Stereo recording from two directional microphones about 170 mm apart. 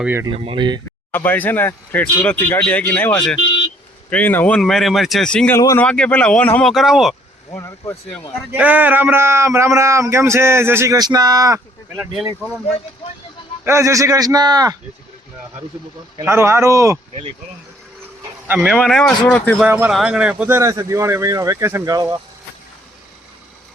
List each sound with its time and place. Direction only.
0.0 s speech: 15° right (ahead or behind)
0.3 s speech: 30° right (ahead or behind)
1.1 s speech: 10° left (ahead or behind)
3.4 s vehicle: 25° left (ahead or behind)
4.1 s speech: 10° left (ahead or behind)
5.5 s speech: 15° left (ahead or behind)
5.8 s speech: 5° left (ahead or behind)
7.5 s speech: 15° left (ahead or behind)
8.5 s speech: 10° right (ahead or behind)
13.7 s a man's voice: 15° right (ahead or behind)
16.1 s speech: 15° right (ahead or behind)
18.4 s speech: 10° right (ahead or behind)
18.7 s speech: 5° left (ahead or behind)
19.6 s speech: 10° right (ahead or behind)